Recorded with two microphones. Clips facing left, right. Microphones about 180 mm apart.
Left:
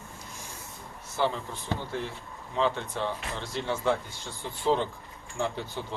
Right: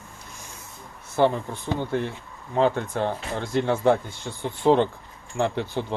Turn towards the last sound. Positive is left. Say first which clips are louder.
# right 7 dB
turn(degrees=-65)  # may be behind; listen again after turning